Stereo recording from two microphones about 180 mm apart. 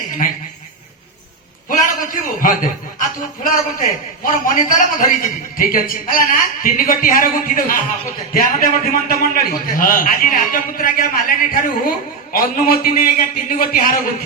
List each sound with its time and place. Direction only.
2.0 s a man's voice: 50° left (ahead or behind)